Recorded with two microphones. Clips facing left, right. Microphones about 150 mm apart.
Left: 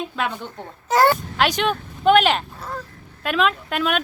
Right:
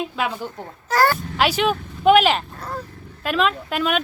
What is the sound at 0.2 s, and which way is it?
Speech, 5° right (ahead or behind).